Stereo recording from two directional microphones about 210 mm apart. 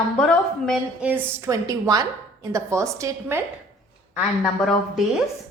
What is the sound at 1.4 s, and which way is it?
A woman's voice, 15° right (ahead or behind).